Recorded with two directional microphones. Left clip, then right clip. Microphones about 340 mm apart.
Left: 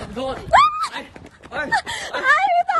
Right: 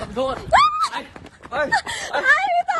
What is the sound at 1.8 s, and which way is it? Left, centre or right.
Speech, centre.